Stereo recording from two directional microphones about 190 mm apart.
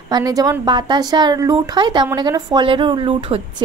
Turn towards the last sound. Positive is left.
turn(degrees=-25)  # may be behind; listen again after turning